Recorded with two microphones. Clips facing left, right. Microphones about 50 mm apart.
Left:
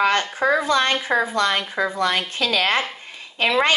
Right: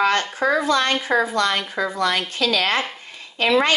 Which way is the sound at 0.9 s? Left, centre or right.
Centre.